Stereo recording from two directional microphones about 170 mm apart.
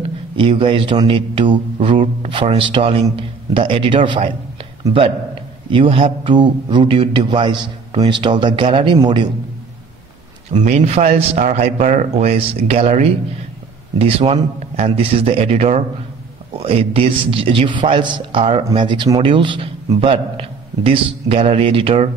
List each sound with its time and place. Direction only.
0.4 s a man's voice: 30° right (ahead or behind)
10.5 s a man's voice: 40° right (ahead or behind)